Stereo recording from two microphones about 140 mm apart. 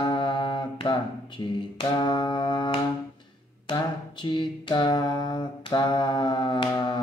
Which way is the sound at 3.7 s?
35° left (ahead or behind).